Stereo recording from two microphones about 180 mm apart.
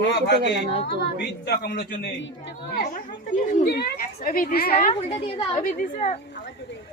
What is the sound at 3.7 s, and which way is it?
Speech, 60° left (ahead or behind).